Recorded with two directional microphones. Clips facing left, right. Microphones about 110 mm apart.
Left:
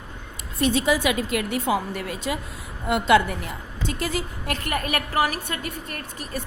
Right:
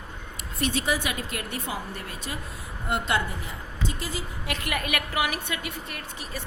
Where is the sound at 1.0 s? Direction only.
90° left; by 4.2 s 65° left (ahead or behind).